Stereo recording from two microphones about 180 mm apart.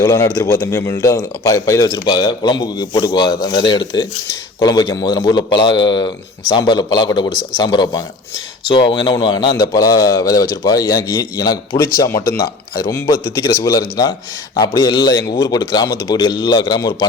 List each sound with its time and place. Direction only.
0.0 s speech: 15° left (ahead or behind)